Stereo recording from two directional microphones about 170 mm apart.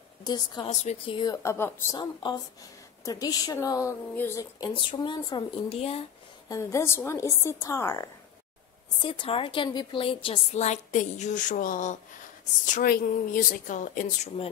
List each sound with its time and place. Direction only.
0.2 s speech: 25° left (ahead or behind)
0.7 s a woman's voice: 40° left (ahead or behind)
1.1 s a woman's voice: 20° left (ahead or behind)
2.0 s a woman's voice: 25° left (ahead or behind); by 4.5 s 10° left (ahead or behind)
4.6 s speech: 30° left (ahead or behind)
6.5 s a woman's voice: 15° left (ahead or behind)
9.0 s a woman's voice: 30° left (ahead or behind)